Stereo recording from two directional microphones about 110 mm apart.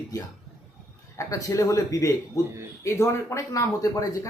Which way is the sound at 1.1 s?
30° left (ahead or behind).